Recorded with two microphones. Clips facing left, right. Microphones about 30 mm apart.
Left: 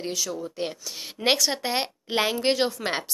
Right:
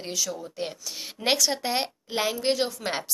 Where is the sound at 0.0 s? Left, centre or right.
Centre.